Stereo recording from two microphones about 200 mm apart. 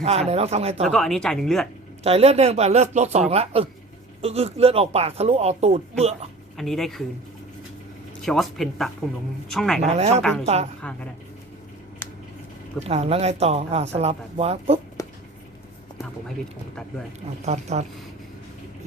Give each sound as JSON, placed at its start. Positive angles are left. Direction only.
{"t": 0.0, "sound": "speech", "side_deg": -30}
{"t": 0.9, "sound": "speech", "side_deg": 0}
{"t": 2.0, "sound": "speech", "side_deg": -30}
{"t": 6.6, "sound": "speech", "side_deg": 0}
{"t": 8.2, "sound": "speech", "side_deg": 0}
{"t": 9.9, "sound": "speech", "side_deg": -35}
{"t": 10.2, "sound": "speech", "side_deg": 5}
{"t": 10.4, "sound": "speech", "side_deg": -35}
{"t": 12.8, "sound": "speech", "side_deg": -30}
{"t": 15.0, "sound": "a sound", "side_deg": 15}
{"t": 17.4, "sound": "speech", "side_deg": -35}